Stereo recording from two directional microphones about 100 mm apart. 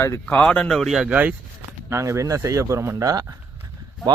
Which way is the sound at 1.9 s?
30° right (ahead or behind).